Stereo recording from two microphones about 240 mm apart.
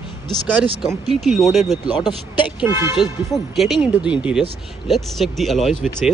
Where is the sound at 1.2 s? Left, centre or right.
Centre.